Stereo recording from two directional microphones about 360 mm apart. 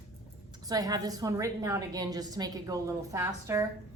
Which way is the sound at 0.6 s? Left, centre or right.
Centre.